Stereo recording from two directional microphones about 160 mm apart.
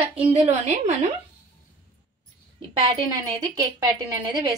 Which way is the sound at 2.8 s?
30° right (ahead or behind).